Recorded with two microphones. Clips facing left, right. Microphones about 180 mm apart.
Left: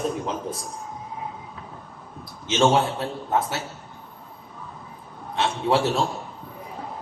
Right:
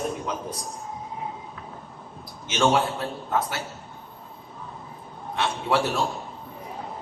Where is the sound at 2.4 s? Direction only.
25° left (ahead or behind).